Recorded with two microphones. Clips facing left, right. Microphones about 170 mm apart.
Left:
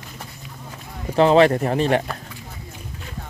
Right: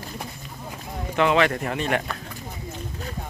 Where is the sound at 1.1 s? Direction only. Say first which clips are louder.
Left 6 dB; 35° left (ahead or behind).